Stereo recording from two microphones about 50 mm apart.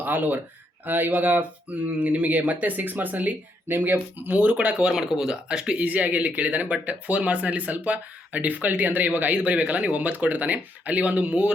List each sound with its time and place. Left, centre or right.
0.0 s speech: right